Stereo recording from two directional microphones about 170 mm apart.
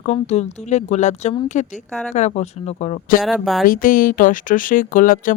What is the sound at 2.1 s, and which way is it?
Speech, 40° left (ahead or behind).